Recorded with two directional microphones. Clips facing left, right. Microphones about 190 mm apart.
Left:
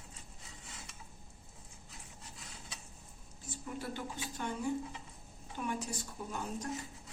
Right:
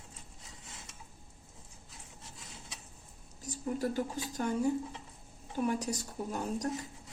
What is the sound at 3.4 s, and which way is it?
Speech, 40° right (ahead or behind).